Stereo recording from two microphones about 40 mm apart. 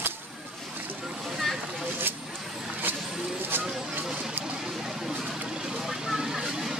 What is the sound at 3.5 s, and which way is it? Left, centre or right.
Vehicle, right.